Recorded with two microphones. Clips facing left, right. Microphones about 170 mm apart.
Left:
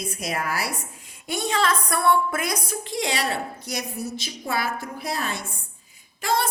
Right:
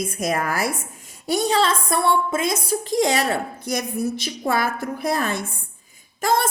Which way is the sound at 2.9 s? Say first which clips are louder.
Right 6 dB; 45° right (ahead or behind).